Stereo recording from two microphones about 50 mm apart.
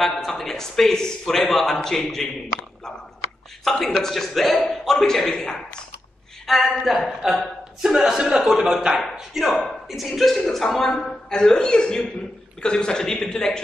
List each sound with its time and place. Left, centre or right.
0.0 s a man's voice: centre
3.8 s a man's voice: centre
6.4 s a man's voice: centre
10.3 s a man's voice: centre